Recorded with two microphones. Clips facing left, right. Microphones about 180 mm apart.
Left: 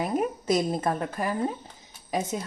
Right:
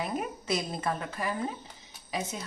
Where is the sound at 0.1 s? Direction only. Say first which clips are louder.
Left 7 dB; 45° left (ahead or behind).